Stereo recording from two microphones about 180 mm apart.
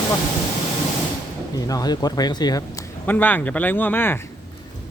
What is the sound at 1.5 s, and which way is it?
Speech, 20° left (ahead or behind).